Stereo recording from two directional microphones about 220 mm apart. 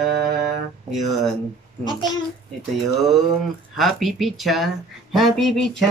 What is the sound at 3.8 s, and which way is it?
Speech, centre (ahead or behind).